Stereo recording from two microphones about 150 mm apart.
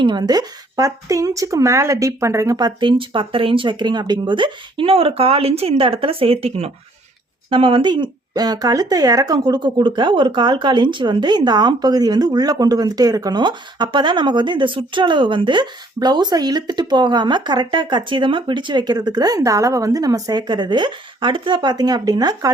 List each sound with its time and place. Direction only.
0.0 s speech: 30° right (ahead or behind)